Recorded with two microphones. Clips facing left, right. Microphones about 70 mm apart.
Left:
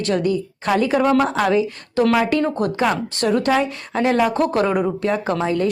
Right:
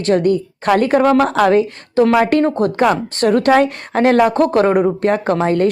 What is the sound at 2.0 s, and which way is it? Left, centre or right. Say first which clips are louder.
Speech: right 4 dB; right.